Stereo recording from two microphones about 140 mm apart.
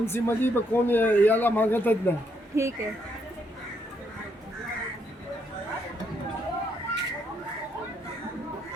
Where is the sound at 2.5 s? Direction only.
20° right (ahead or behind).